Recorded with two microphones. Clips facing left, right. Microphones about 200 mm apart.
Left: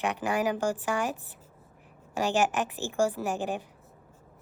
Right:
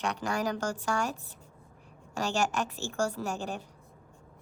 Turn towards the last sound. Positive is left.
turn(degrees=15)  # may be behind; listen again after turning